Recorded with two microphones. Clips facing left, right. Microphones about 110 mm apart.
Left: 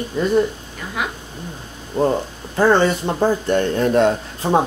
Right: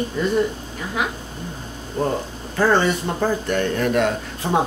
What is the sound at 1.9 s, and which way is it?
Speech, 30° left (ahead or behind).